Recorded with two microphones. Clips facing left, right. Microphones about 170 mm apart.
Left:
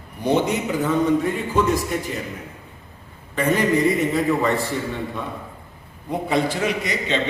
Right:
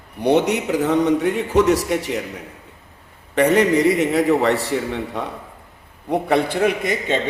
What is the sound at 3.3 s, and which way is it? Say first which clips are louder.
A man's voice: right 4 dB; 75° right (ahead or behind).